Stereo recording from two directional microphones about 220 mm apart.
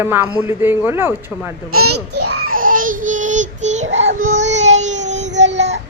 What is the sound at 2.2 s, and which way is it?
Baby cry, 90° right.